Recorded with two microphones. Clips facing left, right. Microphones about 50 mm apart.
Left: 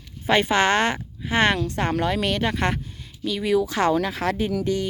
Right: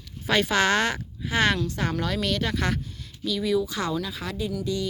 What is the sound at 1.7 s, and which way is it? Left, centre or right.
A woman's voice, left.